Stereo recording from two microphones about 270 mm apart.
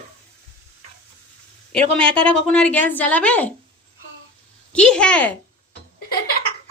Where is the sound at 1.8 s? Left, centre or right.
Right.